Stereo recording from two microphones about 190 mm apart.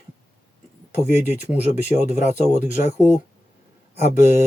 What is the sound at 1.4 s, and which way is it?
Speech, 40° left (ahead or behind).